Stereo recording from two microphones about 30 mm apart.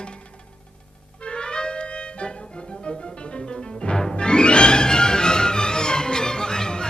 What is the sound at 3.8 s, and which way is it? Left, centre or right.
Music, left.